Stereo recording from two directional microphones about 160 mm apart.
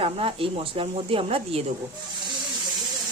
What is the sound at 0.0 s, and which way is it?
Speech, 35° right (ahead or behind).